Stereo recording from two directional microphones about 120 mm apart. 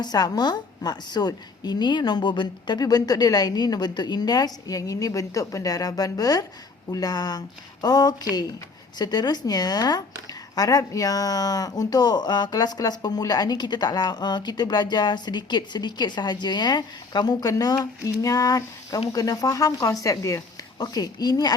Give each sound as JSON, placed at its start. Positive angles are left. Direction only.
{"t": 0.0, "sound": "speech", "side_deg": 35}